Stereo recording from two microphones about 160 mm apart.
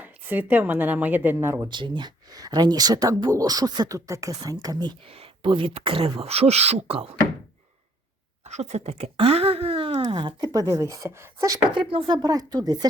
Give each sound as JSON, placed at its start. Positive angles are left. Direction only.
{"t": 0.0, "sound": "a woman's voice", "side_deg": -10}
{"t": 1.7, "sound": "speech", "side_deg": -30}
{"t": 5.1, "sound": "speech", "side_deg": -35}
{"t": 8.4, "sound": "speech", "side_deg": -45}
{"t": 11.7, "sound": "speech", "side_deg": -30}